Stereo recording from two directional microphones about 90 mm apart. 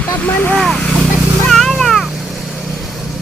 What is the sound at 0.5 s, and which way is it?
Vehicle, 10° left (ahead or behind).